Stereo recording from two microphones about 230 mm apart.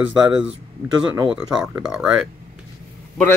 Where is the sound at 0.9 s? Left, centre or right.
Centre.